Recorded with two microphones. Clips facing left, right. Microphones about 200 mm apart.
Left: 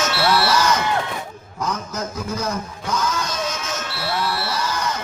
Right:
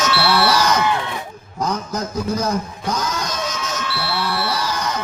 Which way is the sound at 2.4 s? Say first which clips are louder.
Right 4 dB; 35° right (ahead or behind).